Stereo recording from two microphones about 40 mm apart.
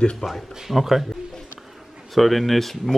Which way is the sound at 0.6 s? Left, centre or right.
Centre.